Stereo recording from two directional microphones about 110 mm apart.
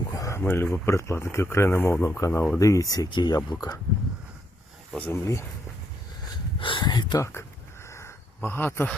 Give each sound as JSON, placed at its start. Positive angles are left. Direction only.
{"t": 0.1, "sound": "speech", "side_deg": 25}
{"t": 4.9, "sound": "speech", "side_deg": 20}
{"t": 6.6, "sound": "speech", "side_deg": 50}
{"t": 7.9, "sound": "a sound", "side_deg": 25}